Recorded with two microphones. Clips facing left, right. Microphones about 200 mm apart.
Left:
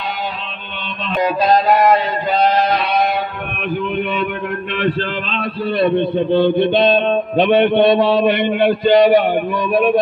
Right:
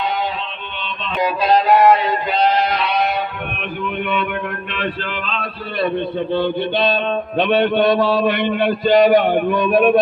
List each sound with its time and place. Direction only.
1.1 s music: 45° left (ahead or behind)
2.3 s a sound: 40° left (ahead or behind)
5.8 s music: 20° left (ahead or behind)
9.6 s speech: 5° left (ahead or behind)